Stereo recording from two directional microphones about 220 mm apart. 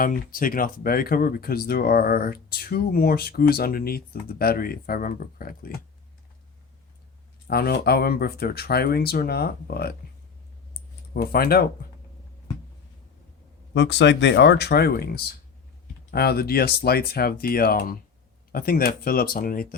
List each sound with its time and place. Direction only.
0.0 s speech: 40° left (ahead or behind)
7.4 s speech: 45° left (ahead or behind)
11.1 s speech: 45° left (ahead or behind)
13.7 s speech: 55° left (ahead or behind)